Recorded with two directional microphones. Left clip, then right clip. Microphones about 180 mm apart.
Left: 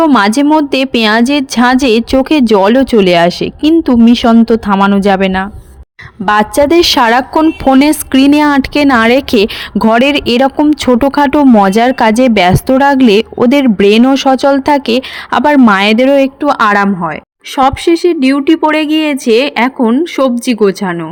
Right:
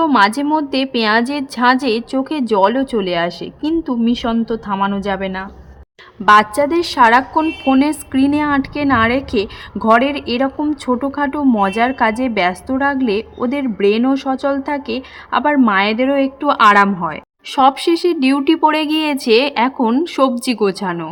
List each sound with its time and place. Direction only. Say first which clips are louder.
0.0 s a woman's voice: left 5 dB; 45° left (ahead or behind); by 21.0 s 20° left (ahead or behind)